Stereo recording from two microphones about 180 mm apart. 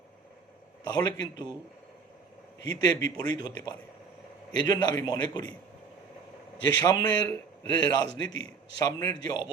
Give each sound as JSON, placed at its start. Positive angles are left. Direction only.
{"t": 0.9, "sound": "a man's voice", "side_deg": 25}
{"t": 2.8, "sound": "a man's voice", "side_deg": 20}
{"t": 6.7, "sound": "a man's voice", "side_deg": 25}
{"t": 8.3, "sound": "a man's voice", "side_deg": 90}
{"t": 8.8, "sound": "a man's voice", "side_deg": 20}